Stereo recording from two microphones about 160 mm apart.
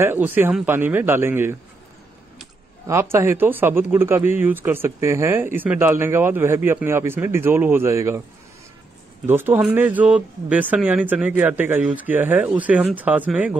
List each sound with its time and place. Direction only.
0.0 s speech: 10° right (ahead or behind)
2.9 s speech: 15° right (ahead or behind)
9.2 s speech: 15° right (ahead or behind)